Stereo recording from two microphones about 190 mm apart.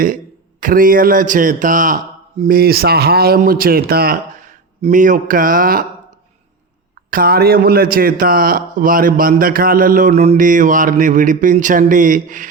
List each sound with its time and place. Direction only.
0.6 s a man's voice: 45° right (ahead or behind)
7.1 s a man's voice: 50° right (ahead or behind)